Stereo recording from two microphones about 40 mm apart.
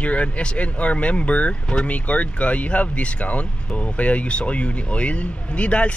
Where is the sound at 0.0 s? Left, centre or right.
Left.